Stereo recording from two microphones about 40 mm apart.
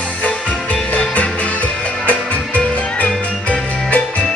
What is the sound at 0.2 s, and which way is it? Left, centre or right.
Music, left.